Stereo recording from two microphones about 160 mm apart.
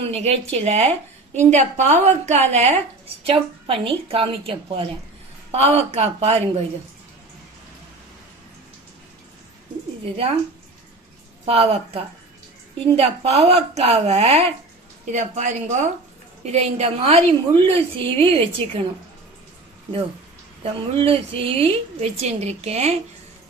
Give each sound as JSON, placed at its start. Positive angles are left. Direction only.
{"t": 0.0, "sound": "a woman's voice", "side_deg": -40}
{"t": 11.4, "sound": "a woman's voice", "side_deg": -40}
{"t": 20.9, "sound": "a woman's voice", "side_deg": -35}